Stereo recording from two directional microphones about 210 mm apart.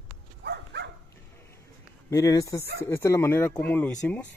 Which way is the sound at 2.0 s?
15° left (ahead or behind).